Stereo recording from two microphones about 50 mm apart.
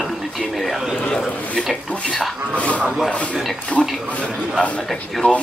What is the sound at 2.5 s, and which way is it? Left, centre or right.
A man's voice, left.